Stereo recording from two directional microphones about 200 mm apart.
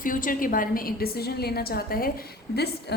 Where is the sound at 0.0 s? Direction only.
45° left (ahead or behind).